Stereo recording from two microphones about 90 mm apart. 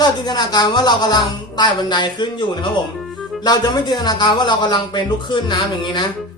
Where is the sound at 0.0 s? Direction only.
50° left (ahead or behind).